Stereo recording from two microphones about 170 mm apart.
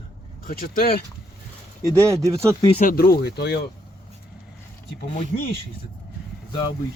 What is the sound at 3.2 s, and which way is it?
Speech, 70° left (ahead or behind).